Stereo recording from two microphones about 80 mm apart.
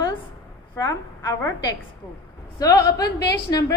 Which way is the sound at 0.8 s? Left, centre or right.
Left.